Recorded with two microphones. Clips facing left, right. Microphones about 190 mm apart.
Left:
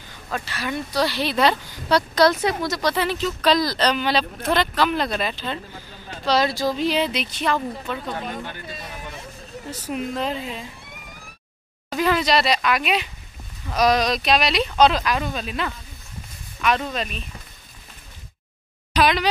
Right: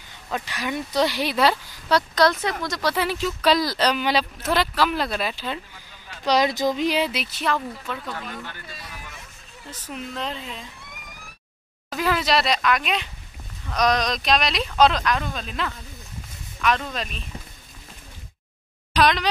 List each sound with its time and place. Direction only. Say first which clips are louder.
0.3 s speech: even; 15° right (ahead or behind); by 2.5 s centre (ahead or behind)
2.8 s speech: right 1 dB; 10° right (ahead or behind)
5.7 s a sound: left 7 dB; 40° left (ahead or behind)
6.2 s speech: even; 15° right (ahead or behind); by 8.0 s centre (ahead or behind)
8.0 s speech: left 4 dB; 25° left (ahead or behind)
9.7 s a woman's voice: left 6 dB; 10° left (ahead or behind)
11.9 s speech: left 2 dB; 5° right (ahead or behind)
18.9 s speech: left 1 dB; 5° left (ahead or behind)